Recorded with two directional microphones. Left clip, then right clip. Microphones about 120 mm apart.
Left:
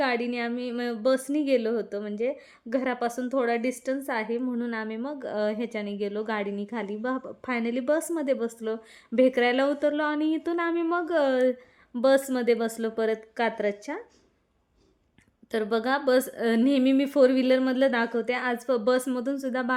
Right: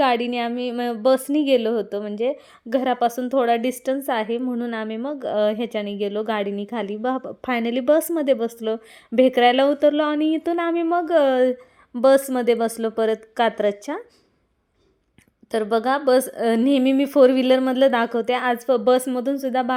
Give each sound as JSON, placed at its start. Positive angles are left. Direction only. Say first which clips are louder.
{"t": 0.0, "sound": "a woman's voice", "louder": "right 7 dB", "side_deg": -40}
{"t": 15.5, "sound": "a woman's voice", "louder": "right 6 dB", "side_deg": -25}